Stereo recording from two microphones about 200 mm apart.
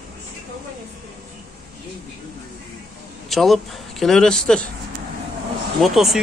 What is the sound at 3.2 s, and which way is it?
Speech, centre (ahead or behind).